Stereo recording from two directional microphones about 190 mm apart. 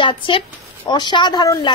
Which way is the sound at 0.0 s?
25° left (ahead or behind).